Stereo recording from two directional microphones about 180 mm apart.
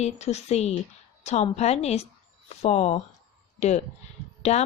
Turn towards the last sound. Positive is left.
turn(degrees=35)  # may be behind; listen again after turning